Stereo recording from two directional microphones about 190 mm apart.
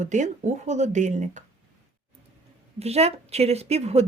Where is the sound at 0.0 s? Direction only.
40° right (ahead or behind).